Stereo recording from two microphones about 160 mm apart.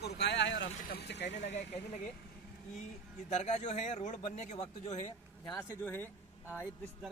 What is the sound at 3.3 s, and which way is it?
A man's voice, 45° left (ahead or behind).